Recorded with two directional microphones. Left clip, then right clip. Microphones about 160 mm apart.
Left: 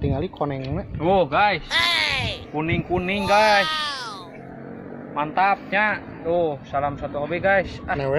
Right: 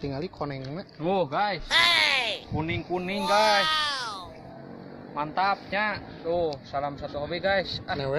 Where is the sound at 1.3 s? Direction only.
20° right (ahead or behind).